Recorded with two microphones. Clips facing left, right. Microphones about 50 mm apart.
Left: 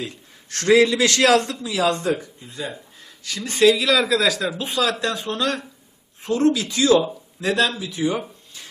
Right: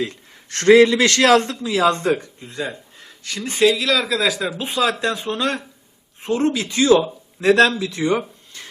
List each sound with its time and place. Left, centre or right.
0.5 s a man's voice: right
3.5 s speech: centre
3.8 s speech: centre
4.3 s speech: centre
4.5 s speech: right
7.4 s speech: right
7.8 s speech: right